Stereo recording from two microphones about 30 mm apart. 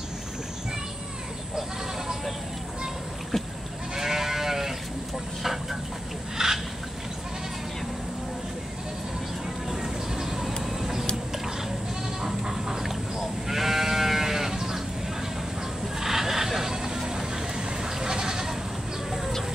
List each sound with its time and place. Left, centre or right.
3.9 s sheep: centre
5.4 s vehicle: centre
6.3 s fowl: centre
9.7 s vehicle: centre
12.2 s goat: centre
16.0 s vehicle: centre
17.6 s bleat: right